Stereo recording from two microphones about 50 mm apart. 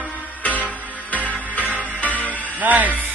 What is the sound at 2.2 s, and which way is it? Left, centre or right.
Music, right.